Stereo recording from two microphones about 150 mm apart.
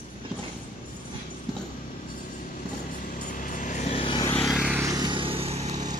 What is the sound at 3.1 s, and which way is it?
Vehicle, 60° left (ahead or behind).